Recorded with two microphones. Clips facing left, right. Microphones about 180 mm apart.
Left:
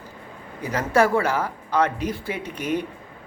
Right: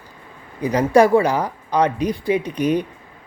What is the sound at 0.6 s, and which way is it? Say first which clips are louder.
Speech: right 6 dB; 15° right (ahead or behind).